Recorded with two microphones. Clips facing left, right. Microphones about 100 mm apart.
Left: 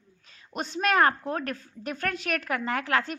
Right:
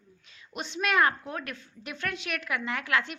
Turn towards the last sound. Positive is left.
turn(degrees=40)  # may be behind; listen again after turning